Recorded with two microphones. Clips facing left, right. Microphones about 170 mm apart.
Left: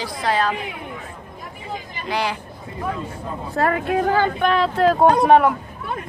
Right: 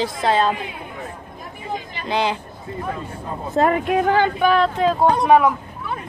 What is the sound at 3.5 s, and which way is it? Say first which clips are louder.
Speech: right 3 dB; 20° right (ahead or behind).